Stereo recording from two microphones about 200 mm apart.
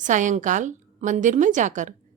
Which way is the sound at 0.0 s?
40° right (ahead or behind).